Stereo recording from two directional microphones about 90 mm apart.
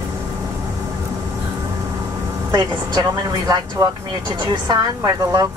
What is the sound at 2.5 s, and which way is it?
A woman's voice, 45° right (ahead or behind).